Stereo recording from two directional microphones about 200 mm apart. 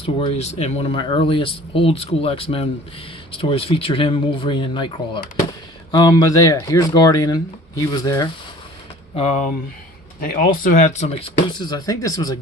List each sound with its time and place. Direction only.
0.0 s speech: 30° left (ahead or behind)
9.1 s speech: 35° left (ahead or behind)
10.2 s speech: 45° left (ahead or behind)
11.6 s speech: 20° left (ahead or behind)